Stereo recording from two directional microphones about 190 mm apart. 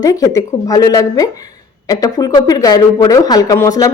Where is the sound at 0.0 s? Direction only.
20° left (ahead or behind).